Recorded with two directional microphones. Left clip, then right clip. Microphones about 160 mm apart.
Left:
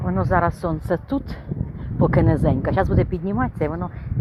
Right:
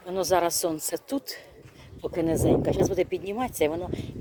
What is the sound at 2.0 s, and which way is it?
Speech, 20° right (ahead or behind).